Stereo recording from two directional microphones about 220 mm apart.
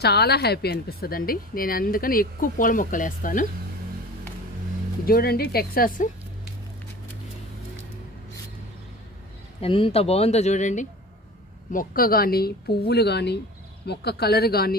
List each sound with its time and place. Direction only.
0.0 s a woman's voice: 45° left (ahead or behind)
5.0 s speech: 45° left (ahead or behind)
9.6 s speech: 25° left (ahead or behind); by 14.8 s 45° left (ahead or behind)